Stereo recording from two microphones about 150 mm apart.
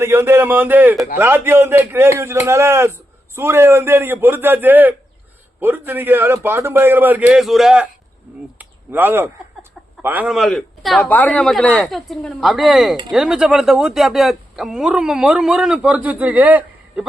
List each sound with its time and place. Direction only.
0.0 s a man's voice: 15° right (ahead or behind)